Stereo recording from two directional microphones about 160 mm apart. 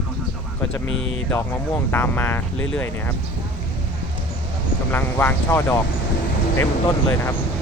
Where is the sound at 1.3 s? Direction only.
15° left (ahead or behind).